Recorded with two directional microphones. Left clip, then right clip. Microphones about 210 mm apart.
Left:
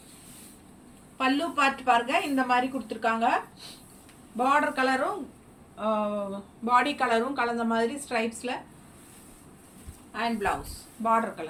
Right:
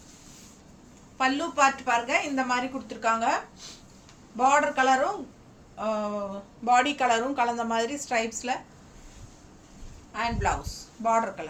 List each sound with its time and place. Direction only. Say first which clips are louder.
1.2 s speech: right 2 dB; 20° right (ahead or behind)
4.4 s speech: right 2 dB; 25° right (ahead or behind)
10.1 s speech: right 1 dB; 25° right (ahead or behind)